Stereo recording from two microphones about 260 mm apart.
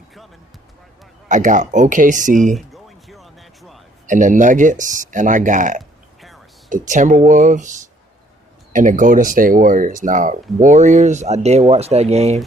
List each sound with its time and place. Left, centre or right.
1.3 s speech: right
2.6 s a sound: centre
4.0 s speech: right